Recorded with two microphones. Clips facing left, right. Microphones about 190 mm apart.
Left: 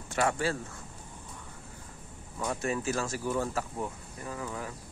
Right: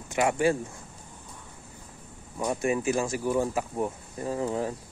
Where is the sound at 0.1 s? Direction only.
15° right (ahead or behind).